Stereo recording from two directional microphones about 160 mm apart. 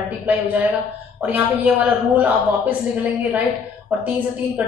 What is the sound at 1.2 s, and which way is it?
A woman's voice, 10° right (ahead or behind).